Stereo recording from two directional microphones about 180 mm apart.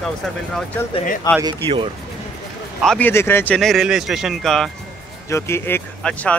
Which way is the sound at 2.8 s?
5° left (ahead or behind).